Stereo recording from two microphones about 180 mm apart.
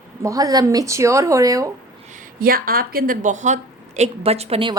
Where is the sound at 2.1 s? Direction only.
50° right (ahead or behind).